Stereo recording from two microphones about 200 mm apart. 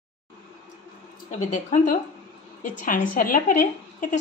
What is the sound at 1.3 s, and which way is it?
A woman's voice, 35° left (ahead or behind).